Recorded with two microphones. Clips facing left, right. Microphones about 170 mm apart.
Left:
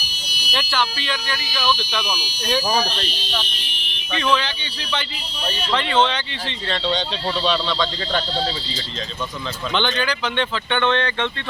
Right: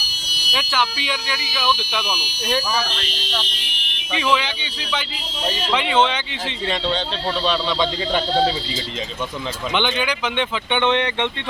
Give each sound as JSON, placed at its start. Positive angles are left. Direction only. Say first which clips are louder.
{"t": 0.7, "sound": "speech", "louder": "right 1 dB", "side_deg": -10}
{"t": 4.1, "sound": "speech", "louder": "even", "side_deg": -10}
{"t": 8.3, "sound": "speech", "louder": "right 6 dB", "side_deg": -55}
{"t": 9.7, "sound": "speech", "louder": "even", "side_deg": -10}